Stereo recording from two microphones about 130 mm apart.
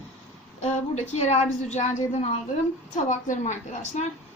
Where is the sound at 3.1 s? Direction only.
75° left (ahead or behind).